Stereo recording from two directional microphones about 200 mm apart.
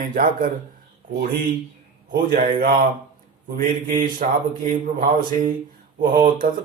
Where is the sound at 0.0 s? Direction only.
45° right (ahead or behind).